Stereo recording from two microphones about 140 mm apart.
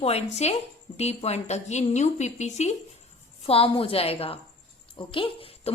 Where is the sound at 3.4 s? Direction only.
45° left (ahead or behind).